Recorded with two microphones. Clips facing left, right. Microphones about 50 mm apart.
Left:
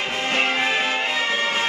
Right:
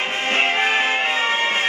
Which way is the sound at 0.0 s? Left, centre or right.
Right.